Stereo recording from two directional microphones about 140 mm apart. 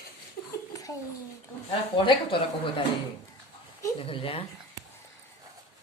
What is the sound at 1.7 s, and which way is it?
Speech, 35° left (ahead or behind).